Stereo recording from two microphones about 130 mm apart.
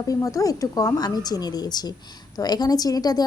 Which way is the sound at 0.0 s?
25° left (ahead or behind).